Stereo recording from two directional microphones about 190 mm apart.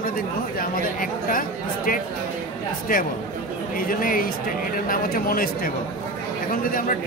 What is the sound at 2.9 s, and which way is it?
A woman's voice, 50° left (ahead or behind).